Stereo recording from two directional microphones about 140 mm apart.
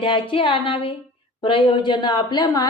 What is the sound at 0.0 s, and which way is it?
A woman's voice, 40° left (ahead or behind).